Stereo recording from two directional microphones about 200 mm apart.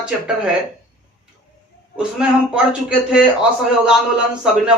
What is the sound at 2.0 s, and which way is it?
A man's voice, 5° right (ahead or behind).